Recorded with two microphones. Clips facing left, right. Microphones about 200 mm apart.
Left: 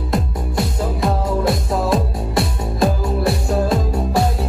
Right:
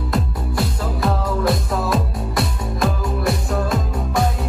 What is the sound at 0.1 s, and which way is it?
Music, 25° left (ahead or behind).